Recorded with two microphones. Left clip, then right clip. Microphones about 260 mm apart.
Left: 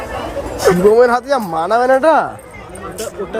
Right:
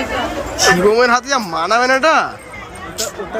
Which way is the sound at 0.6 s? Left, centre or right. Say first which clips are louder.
Left 2 dB; left.